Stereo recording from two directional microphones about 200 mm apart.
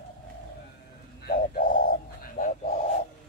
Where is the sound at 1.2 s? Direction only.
45° left (ahead or behind).